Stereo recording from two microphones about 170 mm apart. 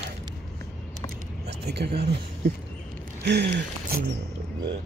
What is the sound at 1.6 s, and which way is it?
Speech, 75° right (ahead or behind).